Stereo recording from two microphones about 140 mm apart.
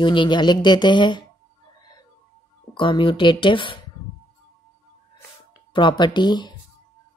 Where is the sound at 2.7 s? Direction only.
35° left (ahead or behind).